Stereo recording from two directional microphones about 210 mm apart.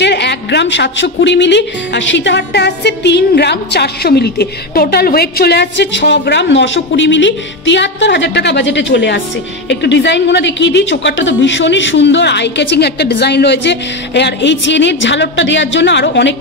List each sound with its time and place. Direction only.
0.0 s a woman's voice: 55° left (ahead or behind)